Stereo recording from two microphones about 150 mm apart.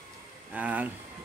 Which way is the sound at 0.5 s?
10° right (ahead or behind).